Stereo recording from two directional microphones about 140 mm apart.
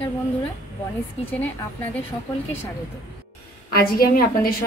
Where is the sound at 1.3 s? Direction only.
15° left (ahead or behind).